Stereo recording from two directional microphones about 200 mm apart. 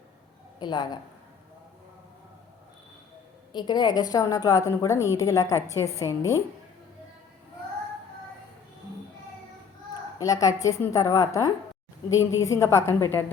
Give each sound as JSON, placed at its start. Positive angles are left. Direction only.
{"t": 0.6, "sound": "a woman's voice", "side_deg": 20}
{"t": 3.5, "sound": "a woman's voice", "side_deg": 20}
{"t": 10.2, "sound": "a woman's voice", "side_deg": 15}